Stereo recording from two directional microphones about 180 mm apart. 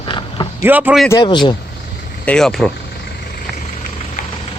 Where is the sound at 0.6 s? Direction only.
10° right (ahead or behind).